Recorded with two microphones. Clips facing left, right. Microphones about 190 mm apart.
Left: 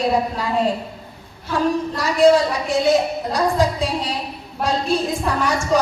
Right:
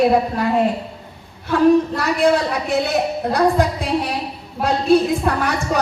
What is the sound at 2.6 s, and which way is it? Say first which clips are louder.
A woman's voice: left 2 dB; 60° right (ahead or behind).